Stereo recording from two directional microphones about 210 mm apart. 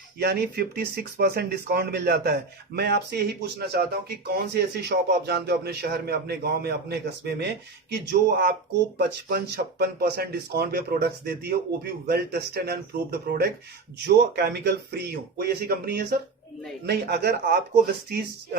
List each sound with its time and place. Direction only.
0.2 s speech: 50° right (ahead or behind)
4.9 s speech: 50° right (ahead or behind)